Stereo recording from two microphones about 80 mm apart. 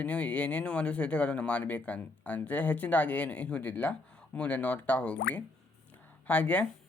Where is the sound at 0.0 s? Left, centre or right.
Centre.